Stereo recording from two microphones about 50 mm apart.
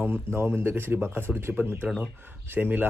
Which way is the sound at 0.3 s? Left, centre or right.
Right.